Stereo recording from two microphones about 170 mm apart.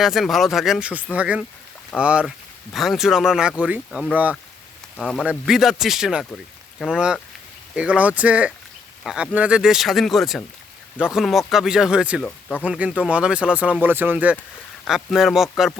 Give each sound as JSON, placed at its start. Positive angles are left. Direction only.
{"t": 0.0, "sound": "speech", "side_deg": 0}
{"t": 4.9, "sound": "speech", "side_deg": 5}
{"t": 12.2, "sound": "speech", "side_deg": 5}
{"t": 12.6, "sound": "speech", "side_deg": -5}